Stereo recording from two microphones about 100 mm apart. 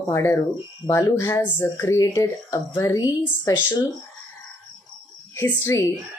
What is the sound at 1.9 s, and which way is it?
Speech, 35° left (ahead or behind).